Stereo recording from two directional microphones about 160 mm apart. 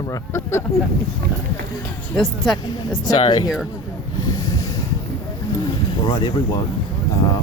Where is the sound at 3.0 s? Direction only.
25° left (ahead or behind).